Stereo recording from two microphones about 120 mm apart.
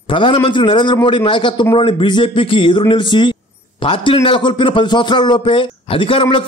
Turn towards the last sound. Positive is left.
turn(degrees=45)  # may be behind; listen again after turning